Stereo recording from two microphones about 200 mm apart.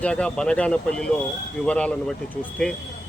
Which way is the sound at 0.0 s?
5° left (ahead or behind).